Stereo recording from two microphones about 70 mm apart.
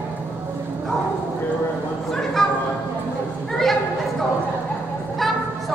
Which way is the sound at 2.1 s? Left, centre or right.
Centre.